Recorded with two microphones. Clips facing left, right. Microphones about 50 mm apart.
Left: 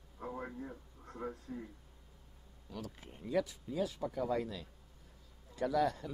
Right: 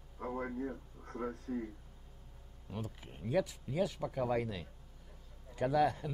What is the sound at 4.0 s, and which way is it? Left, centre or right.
A man's voice, right.